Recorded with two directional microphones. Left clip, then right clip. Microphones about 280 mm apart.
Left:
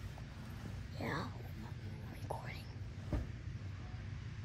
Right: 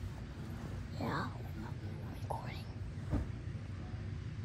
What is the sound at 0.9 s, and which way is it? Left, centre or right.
Speech, centre.